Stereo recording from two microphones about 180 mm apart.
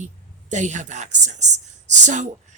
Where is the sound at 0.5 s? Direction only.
40° right (ahead or behind).